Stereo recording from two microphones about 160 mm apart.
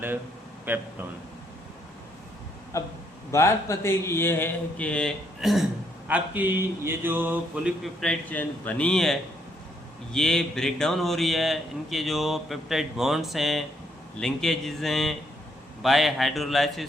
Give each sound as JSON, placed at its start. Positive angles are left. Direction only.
{"t": 0.6, "sound": "a man's voice", "side_deg": -10}
{"t": 2.7, "sound": "a man's voice", "side_deg": 20}
{"t": 6.1, "sound": "mantra", "side_deg": -10}
{"t": 8.0, "sound": "speech", "side_deg": 5}